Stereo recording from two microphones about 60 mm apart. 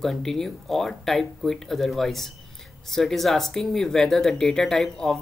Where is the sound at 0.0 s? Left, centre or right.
Centre.